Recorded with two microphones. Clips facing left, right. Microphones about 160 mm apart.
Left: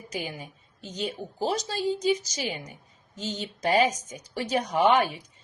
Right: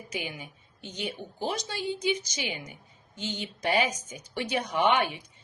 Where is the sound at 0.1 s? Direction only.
35° left (ahead or behind).